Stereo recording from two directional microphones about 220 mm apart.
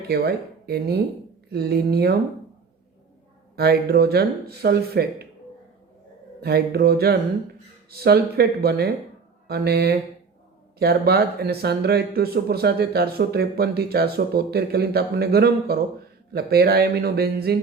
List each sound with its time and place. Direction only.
0.1 s speech: 45° right (ahead or behind)
3.5 s speech: 45° right (ahead or behind)
6.4 s speech: 45° right (ahead or behind)